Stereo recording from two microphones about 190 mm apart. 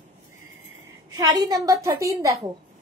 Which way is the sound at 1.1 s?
20° right (ahead or behind).